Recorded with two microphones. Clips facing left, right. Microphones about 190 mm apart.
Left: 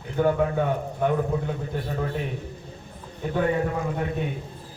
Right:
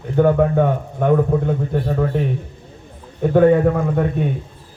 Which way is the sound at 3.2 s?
50° right (ahead or behind).